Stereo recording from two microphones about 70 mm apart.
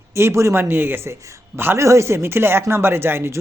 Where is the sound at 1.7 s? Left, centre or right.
Right.